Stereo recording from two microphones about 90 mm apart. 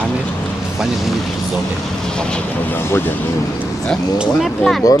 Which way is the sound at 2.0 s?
10° left (ahead or behind).